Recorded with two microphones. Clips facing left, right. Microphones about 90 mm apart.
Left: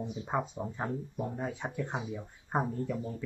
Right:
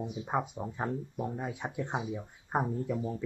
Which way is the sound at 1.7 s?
20° right (ahead or behind).